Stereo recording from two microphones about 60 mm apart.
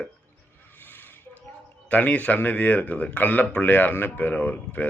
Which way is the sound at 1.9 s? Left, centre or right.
Left.